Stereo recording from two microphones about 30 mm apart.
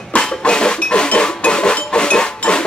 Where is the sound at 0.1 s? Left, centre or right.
Left.